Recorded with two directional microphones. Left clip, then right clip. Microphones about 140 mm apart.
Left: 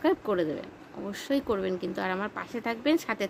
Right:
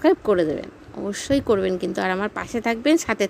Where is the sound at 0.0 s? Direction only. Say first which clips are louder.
Right 8 dB; 40° right (ahead or behind).